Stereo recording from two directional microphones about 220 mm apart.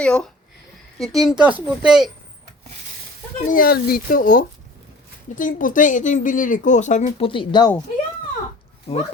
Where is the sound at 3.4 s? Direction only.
40° left (ahead or behind); by 7.7 s 20° left (ahead or behind).